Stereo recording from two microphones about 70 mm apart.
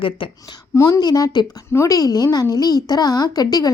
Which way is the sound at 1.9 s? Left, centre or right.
Left.